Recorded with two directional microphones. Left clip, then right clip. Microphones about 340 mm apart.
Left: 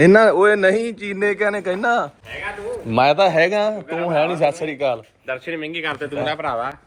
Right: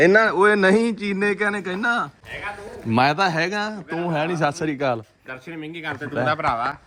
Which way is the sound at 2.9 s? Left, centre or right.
Right.